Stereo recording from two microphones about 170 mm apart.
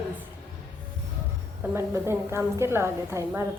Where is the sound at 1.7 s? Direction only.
15° right (ahead or behind).